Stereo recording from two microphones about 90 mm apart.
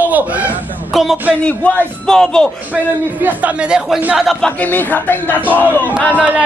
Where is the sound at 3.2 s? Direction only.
15° right (ahead or behind).